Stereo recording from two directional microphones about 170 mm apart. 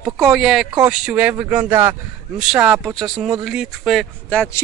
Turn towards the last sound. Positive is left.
turn(degrees=5)  # may be behind; listen again after turning